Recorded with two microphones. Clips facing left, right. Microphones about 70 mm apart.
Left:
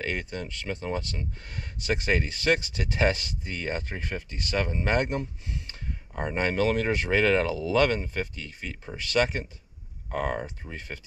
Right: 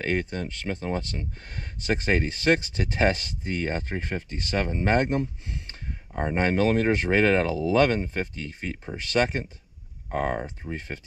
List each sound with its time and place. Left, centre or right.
0.0 s speech: right